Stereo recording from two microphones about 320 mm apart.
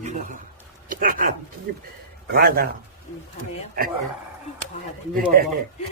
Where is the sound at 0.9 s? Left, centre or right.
Right.